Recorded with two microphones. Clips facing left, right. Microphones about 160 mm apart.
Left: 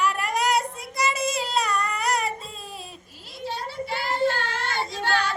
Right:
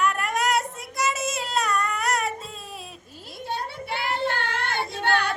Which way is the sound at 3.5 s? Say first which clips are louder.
Even; 60° right (ahead or behind).